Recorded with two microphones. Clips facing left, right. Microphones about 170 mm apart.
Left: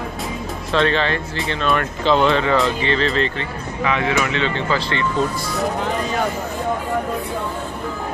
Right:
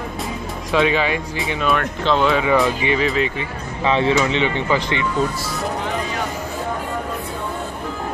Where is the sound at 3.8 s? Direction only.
30° right (ahead or behind).